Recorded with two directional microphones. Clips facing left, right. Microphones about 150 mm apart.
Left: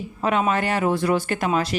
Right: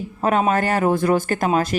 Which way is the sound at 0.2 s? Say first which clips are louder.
Right 3 dB; 45° right (ahead or behind).